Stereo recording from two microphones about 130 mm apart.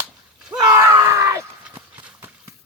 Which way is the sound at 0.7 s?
25° right (ahead or behind).